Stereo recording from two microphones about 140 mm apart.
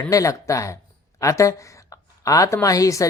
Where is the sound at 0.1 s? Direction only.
25° left (ahead or behind).